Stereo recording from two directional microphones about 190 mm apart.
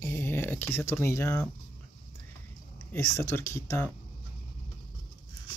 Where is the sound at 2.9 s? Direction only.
15° left (ahead or behind).